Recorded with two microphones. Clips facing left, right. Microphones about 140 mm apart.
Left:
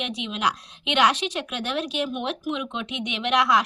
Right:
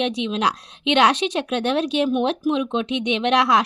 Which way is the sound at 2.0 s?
35° right (ahead or behind).